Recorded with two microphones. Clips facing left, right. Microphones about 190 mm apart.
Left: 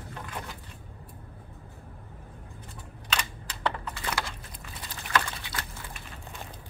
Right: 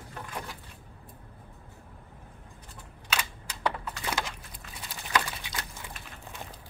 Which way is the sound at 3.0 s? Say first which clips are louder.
Even; 10° right (ahead or behind).